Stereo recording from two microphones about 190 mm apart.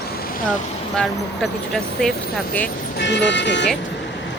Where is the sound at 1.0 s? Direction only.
Centre (ahead or behind).